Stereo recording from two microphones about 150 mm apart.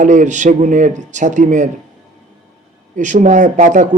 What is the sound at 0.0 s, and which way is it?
A man's voice, 55° right (ahead or behind).